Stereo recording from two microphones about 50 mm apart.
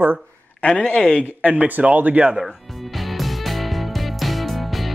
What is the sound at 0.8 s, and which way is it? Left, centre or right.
Speech, left.